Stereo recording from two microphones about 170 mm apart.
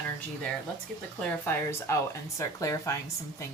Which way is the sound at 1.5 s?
15° left (ahead or behind).